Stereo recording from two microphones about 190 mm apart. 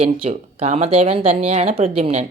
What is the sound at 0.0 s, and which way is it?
Speech, 30° right (ahead or behind).